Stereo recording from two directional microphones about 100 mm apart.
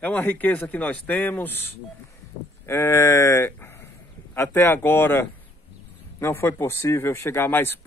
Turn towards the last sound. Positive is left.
turn(degrees=25)  # may be behind; listen again after turning